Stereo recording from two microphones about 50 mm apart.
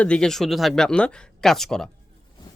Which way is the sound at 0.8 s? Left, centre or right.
Centre.